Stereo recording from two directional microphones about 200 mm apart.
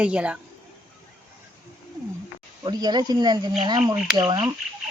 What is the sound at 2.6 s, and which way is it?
Speech, 20° right (ahead or behind).